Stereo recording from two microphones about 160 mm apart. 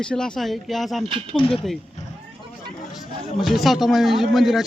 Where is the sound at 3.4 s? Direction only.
Centre (ahead or behind).